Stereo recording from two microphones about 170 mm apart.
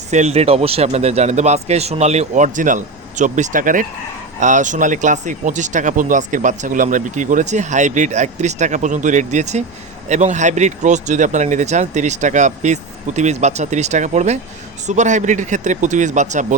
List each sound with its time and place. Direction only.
0.1 s a man's voice: 40° right (ahead or behind)